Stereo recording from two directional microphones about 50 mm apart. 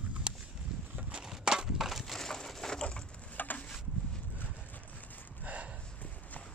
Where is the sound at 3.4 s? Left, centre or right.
Left.